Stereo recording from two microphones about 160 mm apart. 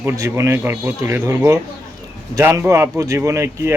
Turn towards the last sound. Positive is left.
turn(degrees=-20)  # may be behind; listen again after turning